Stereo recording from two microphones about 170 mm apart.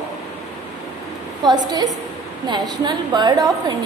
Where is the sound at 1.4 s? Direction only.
25° right (ahead or behind).